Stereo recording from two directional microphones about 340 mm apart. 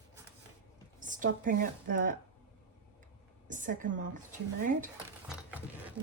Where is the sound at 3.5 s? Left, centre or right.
Right.